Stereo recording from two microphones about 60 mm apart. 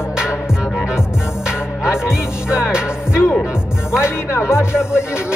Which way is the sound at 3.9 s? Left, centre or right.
Left.